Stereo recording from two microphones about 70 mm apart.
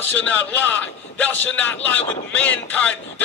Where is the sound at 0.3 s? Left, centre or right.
Left.